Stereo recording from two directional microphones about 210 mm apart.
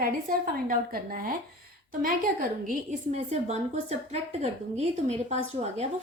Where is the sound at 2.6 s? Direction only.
30° right (ahead or behind).